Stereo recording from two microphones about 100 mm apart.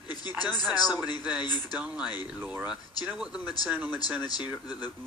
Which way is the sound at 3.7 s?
20° right (ahead or behind).